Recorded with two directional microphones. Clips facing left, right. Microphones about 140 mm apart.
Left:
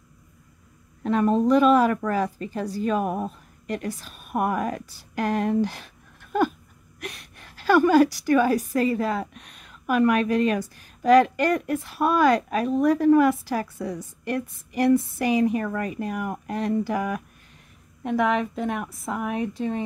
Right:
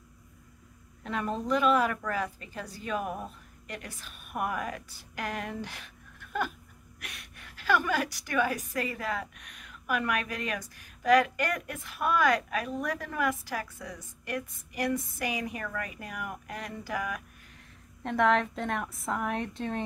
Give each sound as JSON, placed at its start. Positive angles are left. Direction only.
{"t": 1.0, "sound": "a woman's voice", "side_deg": 40}
{"t": 18.0, "sound": "a woman's voice", "side_deg": 5}